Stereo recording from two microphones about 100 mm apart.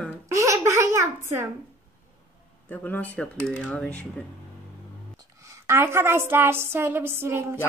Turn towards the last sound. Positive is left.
turn(degrees=-25)  # may be behind; listen again after turning